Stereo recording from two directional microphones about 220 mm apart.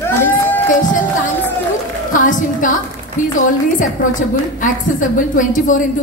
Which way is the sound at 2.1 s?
35° left (ahead or behind).